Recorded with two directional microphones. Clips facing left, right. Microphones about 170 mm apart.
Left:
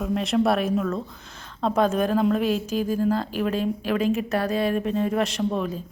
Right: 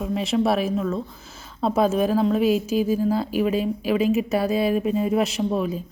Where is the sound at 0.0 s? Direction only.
Centre (ahead or behind).